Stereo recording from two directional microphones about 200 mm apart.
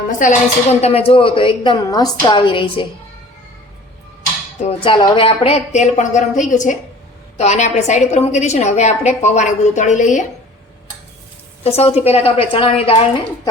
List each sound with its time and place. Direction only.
0.1 s speech: 40° left (ahead or behind)
4.6 s a woman's voice: 25° left (ahead or behind)
11.6 s speech: 30° left (ahead or behind)